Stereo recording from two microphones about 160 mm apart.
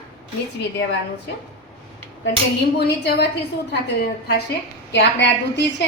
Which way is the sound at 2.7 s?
90° left.